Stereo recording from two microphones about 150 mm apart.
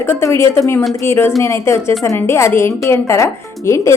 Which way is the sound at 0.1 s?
15° left (ahead or behind).